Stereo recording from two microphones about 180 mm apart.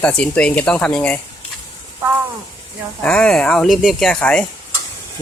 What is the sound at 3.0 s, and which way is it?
Speech, 10° left (ahead or behind).